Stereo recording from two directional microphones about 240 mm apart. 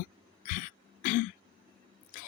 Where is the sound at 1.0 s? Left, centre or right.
Left.